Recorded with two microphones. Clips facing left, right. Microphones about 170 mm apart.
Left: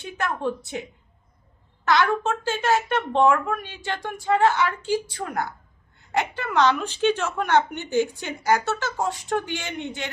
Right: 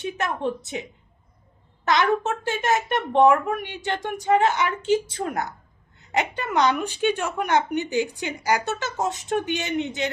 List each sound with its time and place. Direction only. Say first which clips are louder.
0.0 s a woman's voice: right 1 dB; 20° right (ahead or behind)